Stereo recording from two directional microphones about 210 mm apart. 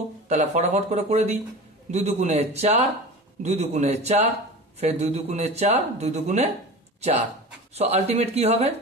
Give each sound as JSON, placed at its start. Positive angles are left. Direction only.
{"t": 0.3, "sound": "speech", "side_deg": -30}
{"t": 7.7, "sound": "speech", "side_deg": -30}